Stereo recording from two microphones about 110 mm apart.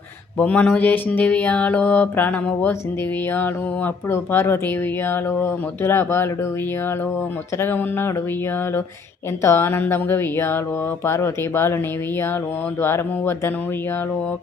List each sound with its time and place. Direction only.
0.3 s mantra: 10° left (ahead or behind)
3.3 s speech: 15° left (ahead or behind)
7.6 s speech: 20° left (ahead or behind)
9.4 s speech: 20° left (ahead or behind)
12.8 s speech: 20° left (ahead or behind)